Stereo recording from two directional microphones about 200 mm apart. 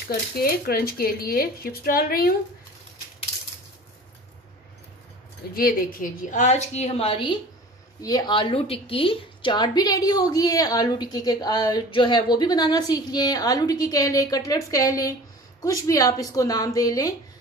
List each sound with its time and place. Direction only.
0.4 s speech: 50° left (ahead or behind)
5.5 s a woman's voice: 45° left (ahead or behind); by 17.1 s 15° left (ahead or behind)